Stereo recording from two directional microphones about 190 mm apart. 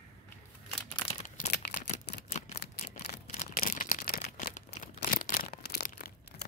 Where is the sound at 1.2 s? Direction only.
40° left (ahead or behind).